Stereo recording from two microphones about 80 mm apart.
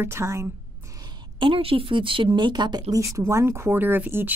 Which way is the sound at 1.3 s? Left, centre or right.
Right.